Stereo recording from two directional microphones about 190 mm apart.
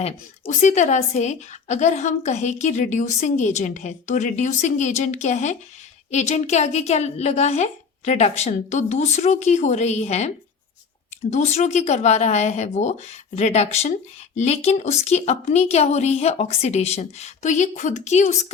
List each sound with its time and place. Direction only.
0.4 s a woman's voice: 40° left (ahead or behind)